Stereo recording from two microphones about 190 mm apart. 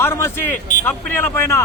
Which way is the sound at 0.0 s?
10° left (ahead or behind).